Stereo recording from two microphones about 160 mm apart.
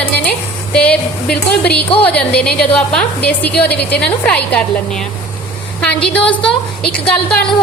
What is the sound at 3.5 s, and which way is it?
Speech, 90° left.